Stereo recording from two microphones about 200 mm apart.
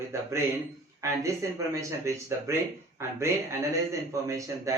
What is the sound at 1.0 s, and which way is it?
Speech, 15° right (ahead or behind).